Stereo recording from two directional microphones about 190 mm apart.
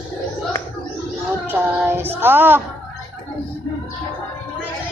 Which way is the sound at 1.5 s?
10° right (ahead or behind).